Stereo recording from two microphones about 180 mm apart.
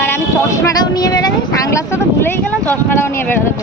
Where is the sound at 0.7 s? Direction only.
20° left (ahead or behind).